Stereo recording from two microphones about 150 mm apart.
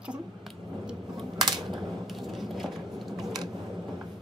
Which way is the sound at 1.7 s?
Centre (ahead or behind).